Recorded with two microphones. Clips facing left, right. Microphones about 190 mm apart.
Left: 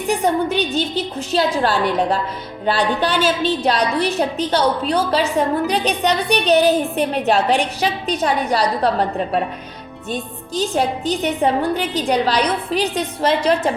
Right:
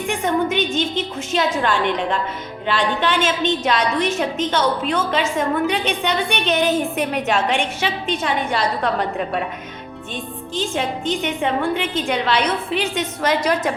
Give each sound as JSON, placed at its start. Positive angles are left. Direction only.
{"t": 0.1, "sound": "a woman's voice", "side_deg": 35}